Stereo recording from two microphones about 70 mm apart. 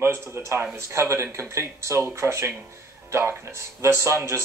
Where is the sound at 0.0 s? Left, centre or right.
Right.